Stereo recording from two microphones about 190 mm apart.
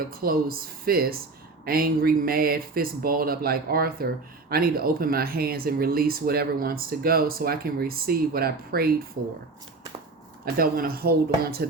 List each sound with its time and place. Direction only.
0.0 s speech: 50° right (ahead or behind)
10.4 s speech: 50° right (ahead or behind)